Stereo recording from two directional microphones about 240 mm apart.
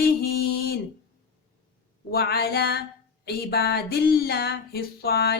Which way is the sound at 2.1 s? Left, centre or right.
Left.